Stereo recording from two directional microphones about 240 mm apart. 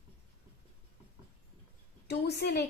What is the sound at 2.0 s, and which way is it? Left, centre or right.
Speech, left.